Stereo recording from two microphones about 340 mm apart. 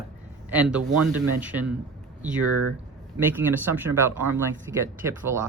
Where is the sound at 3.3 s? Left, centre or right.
Centre.